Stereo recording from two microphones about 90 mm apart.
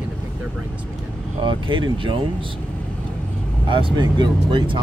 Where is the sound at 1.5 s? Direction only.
70° right (ahead or behind).